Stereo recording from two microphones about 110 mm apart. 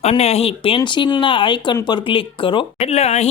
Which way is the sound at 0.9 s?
45° left (ahead or behind).